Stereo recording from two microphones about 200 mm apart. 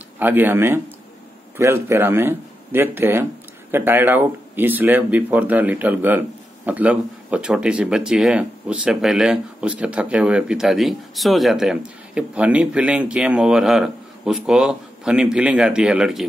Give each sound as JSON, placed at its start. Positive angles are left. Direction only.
{"t": 0.2, "sound": "speech", "side_deg": -10}